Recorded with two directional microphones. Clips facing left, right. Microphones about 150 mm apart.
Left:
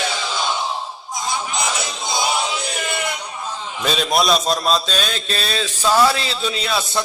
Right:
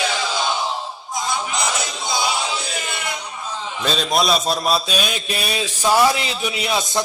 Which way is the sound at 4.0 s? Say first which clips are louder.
Left 1 dB; centre (ahead or behind).